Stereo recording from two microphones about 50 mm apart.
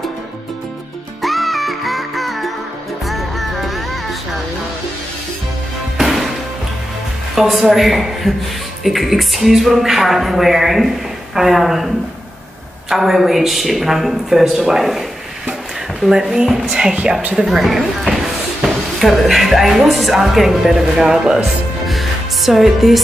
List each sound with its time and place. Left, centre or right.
1.2 s music: centre
5.9 s music: centre
7.3 s speech: centre
12.9 s speech: centre
16.1 s speech: centre
17.4 s speech: centre